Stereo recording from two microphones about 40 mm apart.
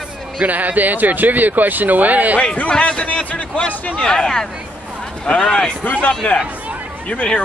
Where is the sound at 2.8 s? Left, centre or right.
Left.